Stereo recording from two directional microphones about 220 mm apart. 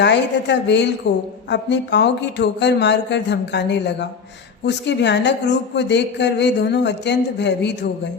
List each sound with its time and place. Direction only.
0.0 s speech: 50° left (ahead or behind)